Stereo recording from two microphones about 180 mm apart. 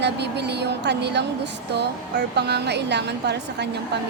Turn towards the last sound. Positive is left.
turn(degrees=-70)  # may be behind; listen again after turning